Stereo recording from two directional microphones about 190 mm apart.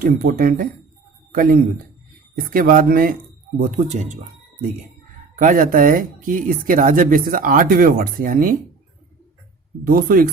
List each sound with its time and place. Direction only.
0.2 s speech: 50° right (ahead or behind)
5.4 s speech: 45° right (ahead or behind)
9.8 s speech: 50° right (ahead or behind)